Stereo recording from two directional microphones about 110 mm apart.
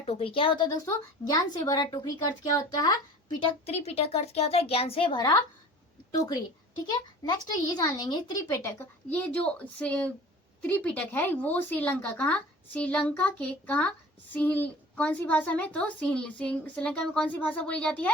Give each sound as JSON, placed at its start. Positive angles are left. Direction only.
{"t": 0.0, "sound": "speech", "side_deg": 60}
{"t": 1.2, "sound": "speech", "side_deg": 35}
{"t": 3.4, "sound": "speech", "side_deg": 70}
{"t": 5.1, "sound": "a woman's voice", "side_deg": 40}
{"t": 9.0, "sound": "a woman's voice", "side_deg": 15}